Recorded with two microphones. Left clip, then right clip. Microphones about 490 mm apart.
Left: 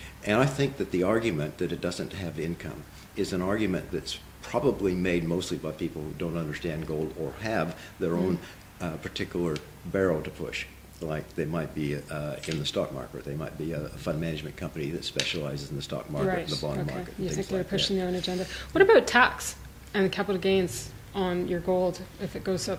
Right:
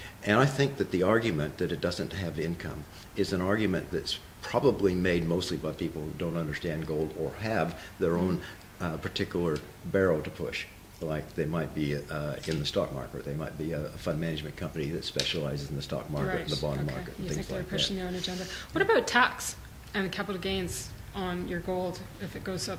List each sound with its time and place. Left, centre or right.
0.3 s speech: right
16.3 s speech: left